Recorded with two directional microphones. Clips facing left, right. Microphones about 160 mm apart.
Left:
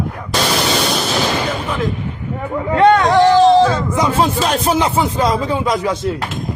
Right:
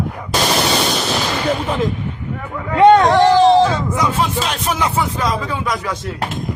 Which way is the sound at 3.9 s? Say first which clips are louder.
Left 3 dB; 30° left (ahead or behind).